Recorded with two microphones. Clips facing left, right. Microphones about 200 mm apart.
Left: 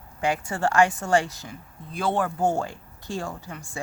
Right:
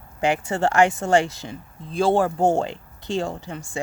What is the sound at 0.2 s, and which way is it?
A woman's voice, 25° right (ahead or behind).